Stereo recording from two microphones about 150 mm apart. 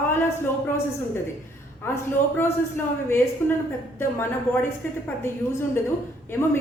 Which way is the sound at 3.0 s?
15° left (ahead or behind).